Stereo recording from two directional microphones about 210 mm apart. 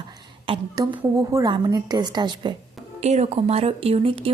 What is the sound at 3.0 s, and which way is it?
A woman's voice, 30° right (ahead or behind).